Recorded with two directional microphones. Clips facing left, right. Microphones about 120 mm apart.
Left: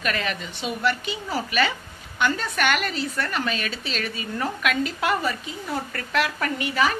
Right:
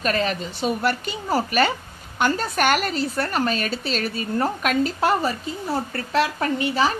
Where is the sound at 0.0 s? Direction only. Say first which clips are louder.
Right 4 dB; 35° right (ahead or behind).